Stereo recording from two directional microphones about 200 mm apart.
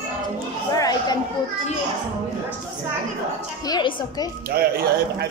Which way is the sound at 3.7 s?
20° left (ahead or behind).